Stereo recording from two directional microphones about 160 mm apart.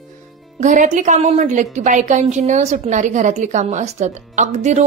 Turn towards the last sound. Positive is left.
turn(degrees=-45)  # may be behind; listen again after turning